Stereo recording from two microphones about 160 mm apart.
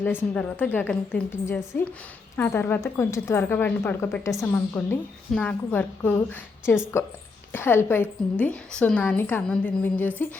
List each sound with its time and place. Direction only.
0.0 s a woman's voice: 10° left (ahead or behind)